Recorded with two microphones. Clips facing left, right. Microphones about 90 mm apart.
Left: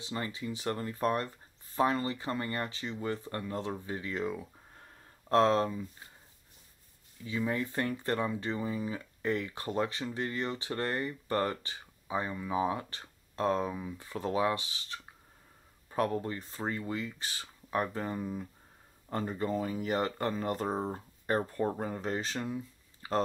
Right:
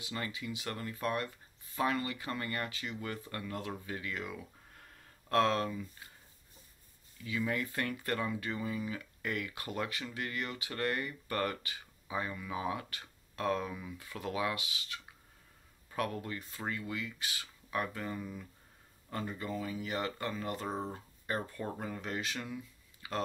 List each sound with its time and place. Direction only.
0.0 s speech: 30° left (ahead or behind)
7.2 s speech: 30° left (ahead or behind)
23.0 s a sound: 40° left (ahead or behind)